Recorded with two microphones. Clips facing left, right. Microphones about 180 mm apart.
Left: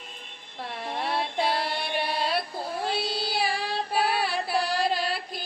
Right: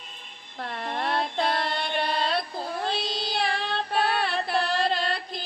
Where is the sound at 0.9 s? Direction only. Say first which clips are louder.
Right 1 dB; 5° left (ahead or behind).